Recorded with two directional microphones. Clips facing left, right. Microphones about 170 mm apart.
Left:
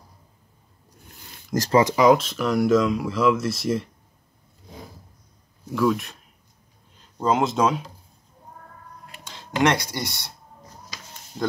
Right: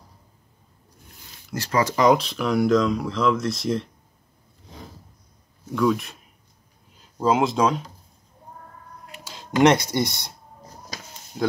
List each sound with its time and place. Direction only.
1.7 s speech: 20° left (ahead or behind)
2.0 s speech: centre (ahead or behind)
5.7 s speech: centre (ahead or behind)
7.2 s speech: centre (ahead or behind)
9.2 s a sound: 10° right (ahead or behind)
9.6 s speech: 20° right (ahead or behind)